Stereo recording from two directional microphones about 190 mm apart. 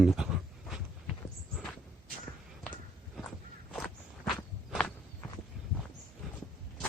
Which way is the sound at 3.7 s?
5° left (ahead or behind).